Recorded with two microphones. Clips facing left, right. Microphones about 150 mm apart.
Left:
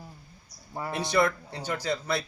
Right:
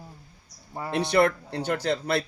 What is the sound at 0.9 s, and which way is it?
Speech, 60° right (ahead or behind).